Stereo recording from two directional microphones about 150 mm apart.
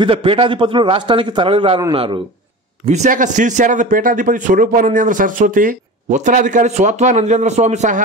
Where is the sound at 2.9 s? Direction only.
55° right (ahead or behind).